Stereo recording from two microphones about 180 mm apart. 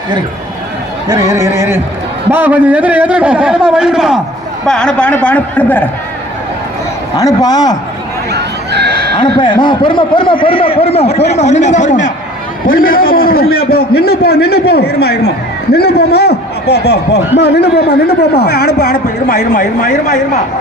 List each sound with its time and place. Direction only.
1.0 s a man's voice: 20° right (ahead or behind); by 5.9 s 10° left (ahead or behind)
7.2 s speech: 20° left (ahead or behind)
8.3 s neigh: 65° right (ahead or behind)
9.1 s a man's voice: 25° left (ahead or behind); by 20.1 s 45° left (ahead or behind)